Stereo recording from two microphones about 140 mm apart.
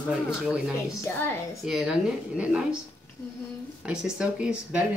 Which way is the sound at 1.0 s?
15° left (ahead or behind).